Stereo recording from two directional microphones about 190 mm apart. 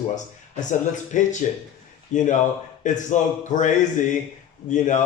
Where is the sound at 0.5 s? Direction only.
40° left (ahead or behind).